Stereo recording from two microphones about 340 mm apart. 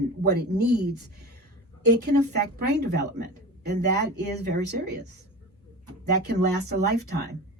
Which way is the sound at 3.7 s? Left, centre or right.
Right.